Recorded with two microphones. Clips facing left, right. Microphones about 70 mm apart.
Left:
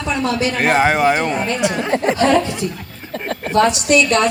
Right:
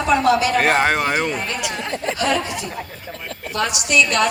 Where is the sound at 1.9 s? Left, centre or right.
Left.